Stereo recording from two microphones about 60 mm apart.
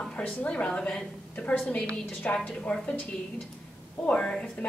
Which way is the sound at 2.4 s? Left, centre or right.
Left.